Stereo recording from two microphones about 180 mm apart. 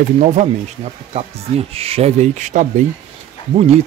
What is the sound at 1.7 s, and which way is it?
Speech, 35° right (ahead or behind).